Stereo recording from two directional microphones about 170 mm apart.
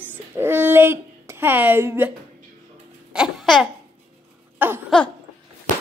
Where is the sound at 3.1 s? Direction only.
Centre (ahead or behind).